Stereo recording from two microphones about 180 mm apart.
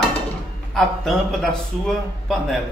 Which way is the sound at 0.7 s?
Centre (ahead or behind).